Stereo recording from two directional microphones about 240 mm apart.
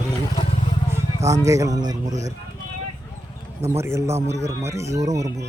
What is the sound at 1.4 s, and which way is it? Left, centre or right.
Speech, centre.